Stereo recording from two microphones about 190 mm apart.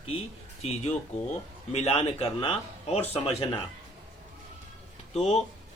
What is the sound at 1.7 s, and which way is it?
Speech, 35° left (ahead or behind).